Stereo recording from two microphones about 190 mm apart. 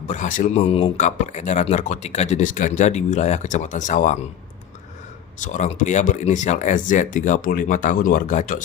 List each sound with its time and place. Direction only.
0.1 s speech: 40° left (ahead or behind)
5.4 s speech: 40° left (ahead or behind)